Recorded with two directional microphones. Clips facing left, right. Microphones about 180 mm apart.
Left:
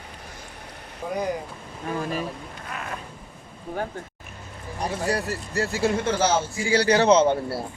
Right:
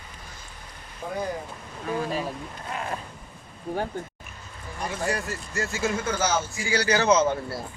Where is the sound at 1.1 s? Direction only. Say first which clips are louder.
Left 3 dB; 15° left (ahead or behind).